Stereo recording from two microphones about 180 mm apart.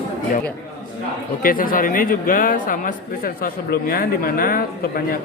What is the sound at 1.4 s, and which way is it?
Speech, 50° left (ahead or behind).